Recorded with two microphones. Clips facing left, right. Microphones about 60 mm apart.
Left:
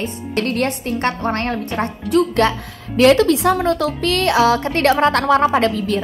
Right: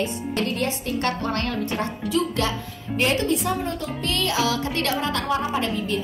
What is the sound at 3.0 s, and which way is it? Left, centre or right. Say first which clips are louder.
A woman's voice: left 10 dB; left.